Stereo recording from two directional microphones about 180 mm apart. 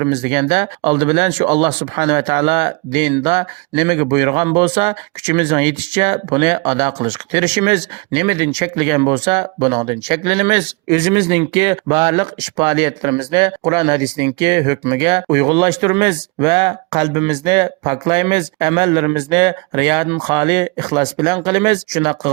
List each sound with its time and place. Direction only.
0.0 s speech: 30° right (ahead or behind)